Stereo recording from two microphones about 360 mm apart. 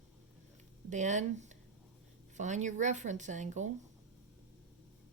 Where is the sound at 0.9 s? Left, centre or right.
Centre.